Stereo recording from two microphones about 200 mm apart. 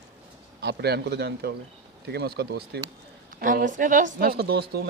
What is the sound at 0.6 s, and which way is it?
A man's voice, 55° right (ahead or behind).